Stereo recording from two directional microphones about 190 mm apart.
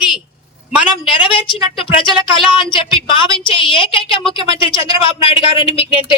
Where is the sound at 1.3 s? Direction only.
25° left (ahead or behind).